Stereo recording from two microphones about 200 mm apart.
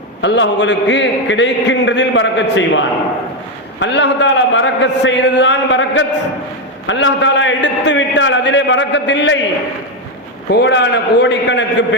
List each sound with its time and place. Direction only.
0.2 s a man's voice: 65° left (ahead or behind)
10.5 s a man's voice: 60° left (ahead or behind)